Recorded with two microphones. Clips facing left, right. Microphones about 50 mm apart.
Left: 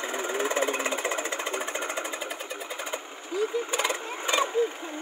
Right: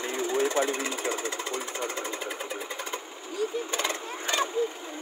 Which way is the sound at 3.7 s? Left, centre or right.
Centre.